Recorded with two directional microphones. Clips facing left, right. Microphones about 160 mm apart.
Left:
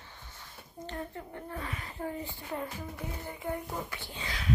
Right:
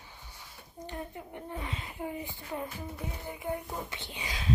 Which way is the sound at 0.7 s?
15° right (ahead or behind).